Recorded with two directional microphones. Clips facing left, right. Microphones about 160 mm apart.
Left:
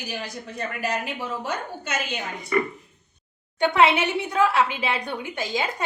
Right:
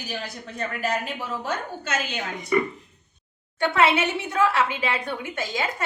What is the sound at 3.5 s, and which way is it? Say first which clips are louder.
Speech: left 2 dB; 15° left (ahead or behind).